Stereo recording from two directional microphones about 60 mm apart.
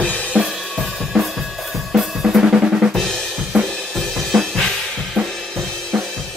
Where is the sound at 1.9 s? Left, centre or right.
Centre.